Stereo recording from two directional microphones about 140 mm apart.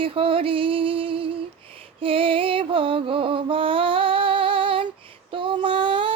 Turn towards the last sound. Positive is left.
turn(degrees=-35)  # may be behind; listen again after turning